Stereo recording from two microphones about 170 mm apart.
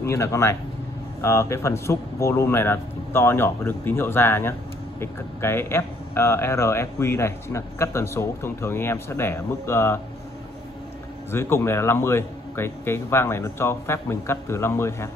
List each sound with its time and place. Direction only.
0.0 s speech: 15° left (ahead or behind)
11.3 s speech: 15° left (ahead or behind)